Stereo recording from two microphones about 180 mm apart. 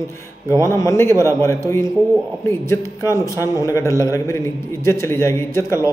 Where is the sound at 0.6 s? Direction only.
15° left (ahead or behind).